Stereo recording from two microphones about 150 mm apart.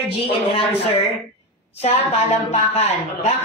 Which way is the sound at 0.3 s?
35° left (ahead or behind).